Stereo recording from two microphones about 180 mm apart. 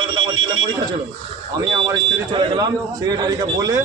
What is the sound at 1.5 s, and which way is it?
A man's voice, 25° right (ahead or behind).